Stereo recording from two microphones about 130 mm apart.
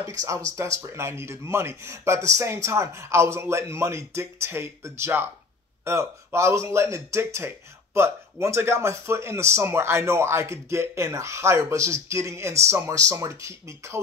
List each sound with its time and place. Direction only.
0.2 s speech: 25° right (ahead or behind)